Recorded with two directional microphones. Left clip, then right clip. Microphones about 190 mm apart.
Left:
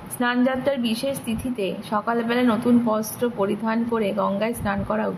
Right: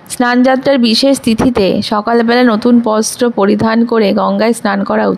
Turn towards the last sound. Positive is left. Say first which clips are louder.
# right 12 dB
turn(degrees=-50)  # may be behind; listen again after turning